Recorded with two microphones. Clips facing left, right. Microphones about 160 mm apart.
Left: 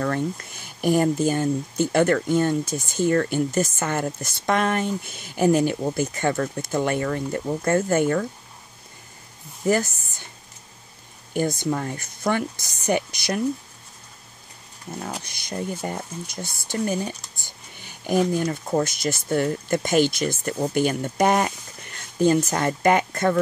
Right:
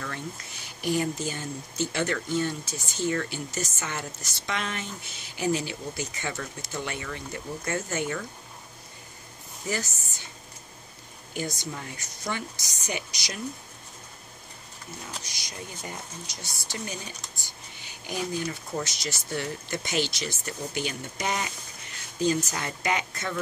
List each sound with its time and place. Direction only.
0.0 s speech: 50° left (ahead or behind)
9.7 s speech: 55° left (ahead or behind)
11.3 s speech: 55° left (ahead or behind)
15.0 s speech: 55° left (ahead or behind)